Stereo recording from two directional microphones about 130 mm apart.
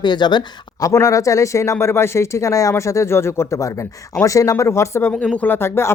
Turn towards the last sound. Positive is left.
turn(degrees=20)  # may be behind; listen again after turning